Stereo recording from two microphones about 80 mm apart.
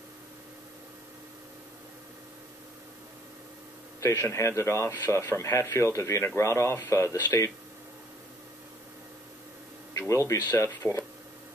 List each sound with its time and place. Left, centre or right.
4.0 s a man's voice: left
9.9 s a man's voice: left